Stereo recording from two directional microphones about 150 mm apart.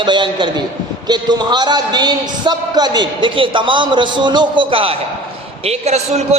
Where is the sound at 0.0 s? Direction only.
30° right (ahead or behind).